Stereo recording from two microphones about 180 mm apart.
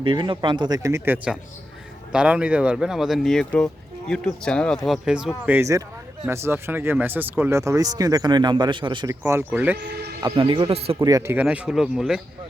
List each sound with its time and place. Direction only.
0.0 s speech: 25° right (ahead or behind); by 9.7 s 10° right (ahead or behind)
9.7 s speech: 60° right (ahead or behind)
10.2 s speech: 25° right (ahead or behind)
11.0 s speech: 15° right (ahead or behind)